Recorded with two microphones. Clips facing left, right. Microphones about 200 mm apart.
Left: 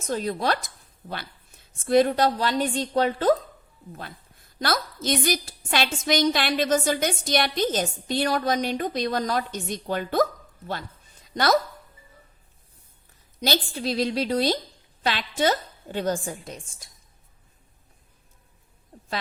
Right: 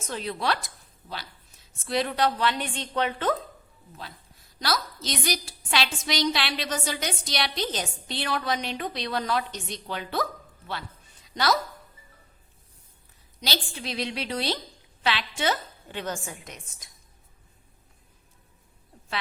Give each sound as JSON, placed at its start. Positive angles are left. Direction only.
{"t": 0.1, "sound": "a woman's voice", "side_deg": 45}
{"t": 1.0, "sound": "a woman's voice", "side_deg": 55}
{"t": 3.9, "sound": "a woman's voice", "side_deg": 50}
{"t": 13.7, "sound": "a woman's voice", "side_deg": 35}